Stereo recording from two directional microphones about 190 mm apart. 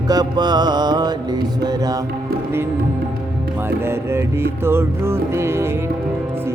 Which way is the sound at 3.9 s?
15° right (ahead or behind).